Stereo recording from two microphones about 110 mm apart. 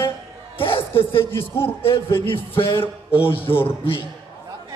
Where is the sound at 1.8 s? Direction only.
55° left (ahead or behind).